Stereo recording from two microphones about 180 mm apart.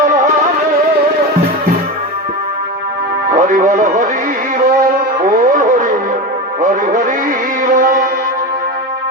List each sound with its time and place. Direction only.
3.3 s music: 45° right (ahead or behind)
5.2 s music: 45° right (ahead or behind)